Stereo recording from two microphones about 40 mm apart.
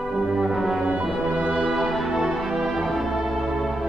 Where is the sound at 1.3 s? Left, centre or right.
Right.